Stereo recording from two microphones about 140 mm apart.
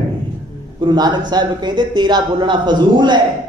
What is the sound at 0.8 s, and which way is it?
Speech, 30° right (ahead or behind).